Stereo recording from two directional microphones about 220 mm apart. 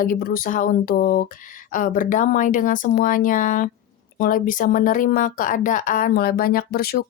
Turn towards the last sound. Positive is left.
turn(degrees=45)  # may be behind; listen again after turning